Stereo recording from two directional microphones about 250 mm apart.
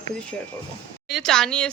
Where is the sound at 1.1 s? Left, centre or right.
Centre.